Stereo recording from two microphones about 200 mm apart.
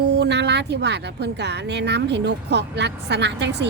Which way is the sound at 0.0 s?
55° right (ahead or behind).